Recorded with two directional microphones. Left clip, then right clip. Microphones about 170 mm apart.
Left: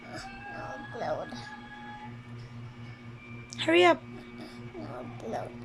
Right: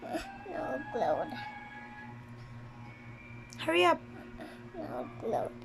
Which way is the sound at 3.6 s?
Centre (ahead or behind).